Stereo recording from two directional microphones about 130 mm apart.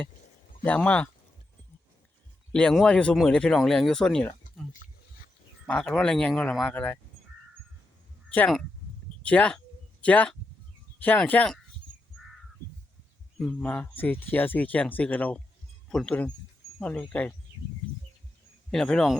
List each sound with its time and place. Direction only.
0.6 s speech: 10° left (ahead or behind)
2.5 s speech: 5° left (ahead or behind)
4.8 s roaring cats: 90° left
5.6 s speech: 5° left (ahead or behind)
9.2 s speech: 10° left (ahead or behind)
13.4 s speech: 10° left (ahead or behind)
18.7 s speech: 5° left (ahead or behind)